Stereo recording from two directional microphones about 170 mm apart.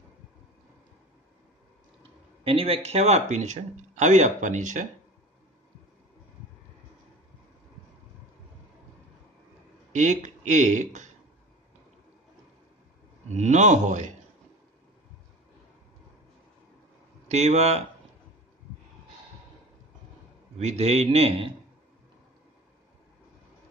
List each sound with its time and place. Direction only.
2.4 s speech: 35° right (ahead or behind)
9.9 s speech: 45° right (ahead or behind)
13.3 s speech: 45° right (ahead or behind)
17.3 s a man's voice: 40° right (ahead or behind)
20.5 s a man's voice: 40° right (ahead or behind)